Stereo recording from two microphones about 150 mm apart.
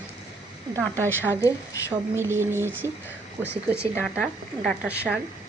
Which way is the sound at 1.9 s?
15° right (ahead or behind).